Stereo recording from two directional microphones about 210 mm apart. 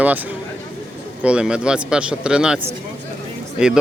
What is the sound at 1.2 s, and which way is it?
Speech, 5° right (ahead or behind).